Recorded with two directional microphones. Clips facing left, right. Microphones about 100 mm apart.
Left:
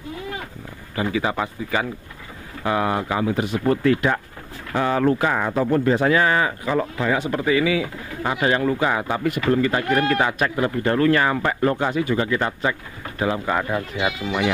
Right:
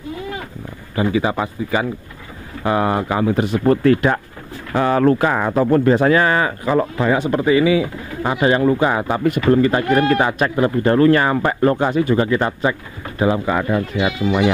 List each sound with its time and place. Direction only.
0.9 s speech: 20° right (ahead or behind)
2.6 s speech: 35° right (ahead or behind)
7.1 s speech: 35° right (ahead or behind)
13.5 s speech: centre (ahead or behind)